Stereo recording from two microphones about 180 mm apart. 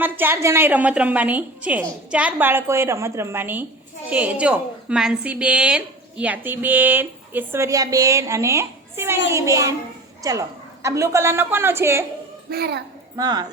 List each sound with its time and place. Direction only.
0.0 s a woman's voice: 10° right (ahead or behind)
12.5 s a child's voice: 65° right (ahead or behind)
13.1 s speech: 20° right (ahead or behind)